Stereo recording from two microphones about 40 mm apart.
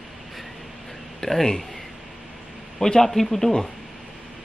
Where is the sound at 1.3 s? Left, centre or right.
Centre.